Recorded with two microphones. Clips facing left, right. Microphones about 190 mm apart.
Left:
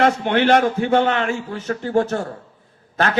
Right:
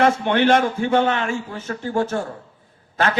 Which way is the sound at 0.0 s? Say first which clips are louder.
Even; 45° left (ahead or behind).